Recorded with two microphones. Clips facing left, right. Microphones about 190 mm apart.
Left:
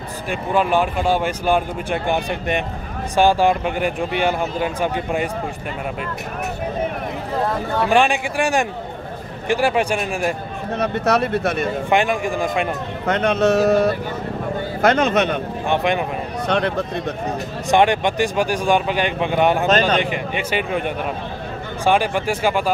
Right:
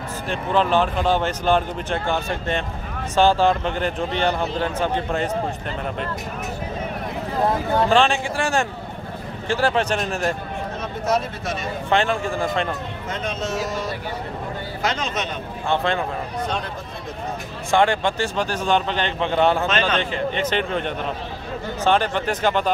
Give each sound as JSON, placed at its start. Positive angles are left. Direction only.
{"t": 0.3, "sound": "speech", "side_deg": 10}
{"t": 7.9, "sound": "speech", "side_deg": 15}
{"t": 10.8, "sound": "speech", "side_deg": 70}
{"t": 11.9, "sound": "speech", "side_deg": 15}
{"t": 13.0, "sound": "speech", "side_deg": 65}
{"t": 15.7, "sound": "speech", "side_deg": 15}
{"t": 16.4, "sound": "speech", "side_deg": 70}
{"t": 17.6, "sound": "speech", "side_deg": 20}